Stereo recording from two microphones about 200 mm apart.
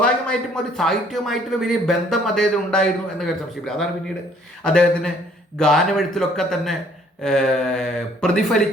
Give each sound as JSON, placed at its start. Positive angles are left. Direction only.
{"t": 0.0, "sound": "speech", "side_deg": 5}